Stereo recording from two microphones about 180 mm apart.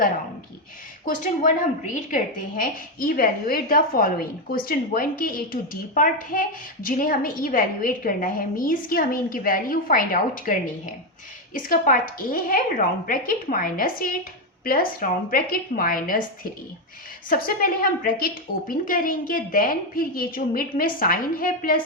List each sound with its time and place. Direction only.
1.0 s a woman's voice: 45° left (ahead or behind)
17.2 s a woman's voice: 50° left (ahead or behind)